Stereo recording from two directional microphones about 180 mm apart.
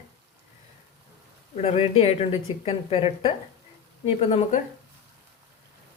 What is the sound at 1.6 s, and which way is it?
Speech, 35° left (ahead or behind).